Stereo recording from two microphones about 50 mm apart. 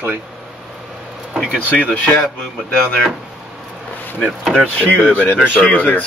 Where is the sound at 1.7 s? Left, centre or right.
Left.